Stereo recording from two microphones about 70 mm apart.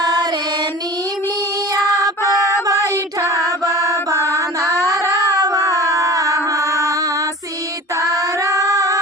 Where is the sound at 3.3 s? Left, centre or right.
Right.